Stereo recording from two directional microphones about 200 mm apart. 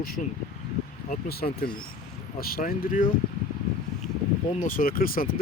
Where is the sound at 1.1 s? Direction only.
50° left (ahead or behind).